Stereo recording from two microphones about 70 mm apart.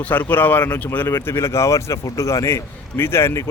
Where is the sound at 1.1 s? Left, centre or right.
Left.